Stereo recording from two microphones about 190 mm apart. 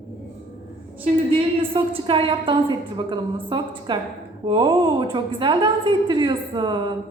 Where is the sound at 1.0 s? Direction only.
30° right (ahead or behind).